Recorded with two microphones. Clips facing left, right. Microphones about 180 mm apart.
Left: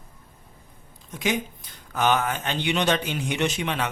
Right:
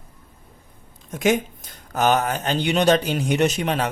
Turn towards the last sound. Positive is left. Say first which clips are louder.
# right 5 dB
turn(degrees=-40)  # may be behind; listen again after turning